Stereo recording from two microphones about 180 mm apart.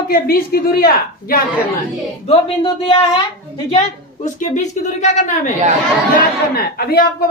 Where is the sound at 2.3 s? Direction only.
30° left (ahead or behind).